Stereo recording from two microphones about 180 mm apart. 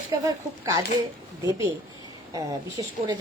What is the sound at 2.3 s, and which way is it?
Speech, 20° right (ahead or behind).